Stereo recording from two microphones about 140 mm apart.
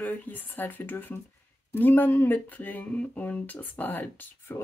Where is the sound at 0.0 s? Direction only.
10° left (ahead or behind).